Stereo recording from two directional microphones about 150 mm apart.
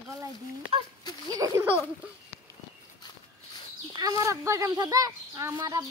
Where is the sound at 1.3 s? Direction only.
20° right (ahead or behind).